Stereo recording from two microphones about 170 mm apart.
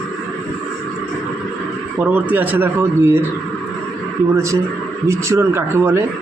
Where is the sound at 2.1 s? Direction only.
10° right (ahead or behind).